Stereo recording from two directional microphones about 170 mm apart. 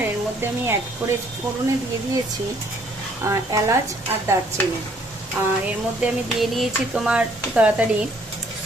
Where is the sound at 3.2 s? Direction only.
15° right (ahead or behind).